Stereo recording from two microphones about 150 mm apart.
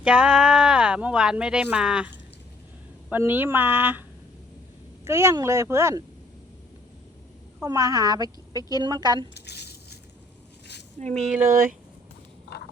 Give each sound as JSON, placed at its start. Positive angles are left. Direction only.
{"t": 0.0, "sound": "speech", "side_deg": -5}
{"t": 3.1, "sound": "a woman's voice", "side_deg": -15}
{"t": 5.0, "sound": "a woman's voice", "side_deg": -20}
{"t": 7.6, "sound": "a woman's voice", "side_deg": -20}
{"t": 9.3, "sound": "squish", "side_deg": 90}
{"t": 11.0, "sound": "speech", "side_deg": -50}